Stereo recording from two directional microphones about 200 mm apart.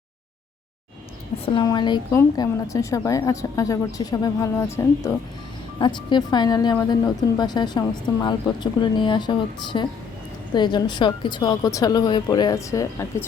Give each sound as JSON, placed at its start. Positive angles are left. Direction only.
{"t": 1.5, "sound": "a woman's voice", "side_deg": 20}